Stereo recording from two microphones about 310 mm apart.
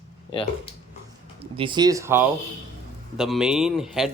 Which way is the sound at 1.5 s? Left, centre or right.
Centre.